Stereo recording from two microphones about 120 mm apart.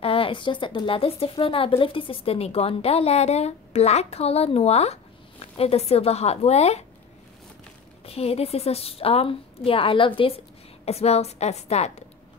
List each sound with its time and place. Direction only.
0.0 s speech: 50° left (ahead or behind)
8.0 s speech: 55° left (ahead or behind)
10.9 s speech: 60° left (ahead or behind)